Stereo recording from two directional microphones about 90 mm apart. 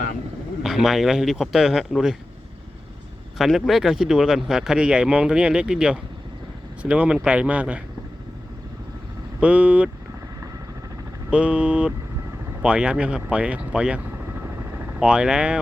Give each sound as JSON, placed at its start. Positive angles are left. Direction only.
{"t": 0.6, "sound": "speech", "side_deg": 0}
{"t": 3.3, "sound": "speech", "side_deg": 0}
{"t": 9.4, "sound": "speech", "side_deg": -15}
{"t": 11.3, "sound": "speech", "side_deg": -10}